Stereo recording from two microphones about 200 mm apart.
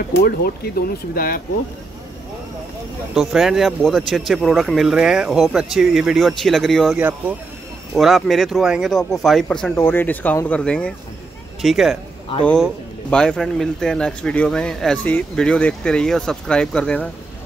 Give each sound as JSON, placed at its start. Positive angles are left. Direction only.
{"t": 0.2, "sound": "speech", "side_deg": 50}
{"t": 3.2, "sound": "speech", "side_deg": 0}
{"t": 13.1, "sound": "speech", "side_deg": 5}